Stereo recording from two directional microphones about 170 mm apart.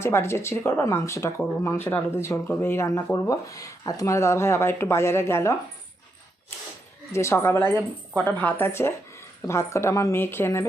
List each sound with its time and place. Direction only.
0.0 s speech: 15° left (ahead or behind)
7.1 s speech: 15° left (ahead or behind)